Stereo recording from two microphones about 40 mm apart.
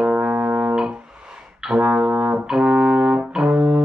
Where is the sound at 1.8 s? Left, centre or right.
Right.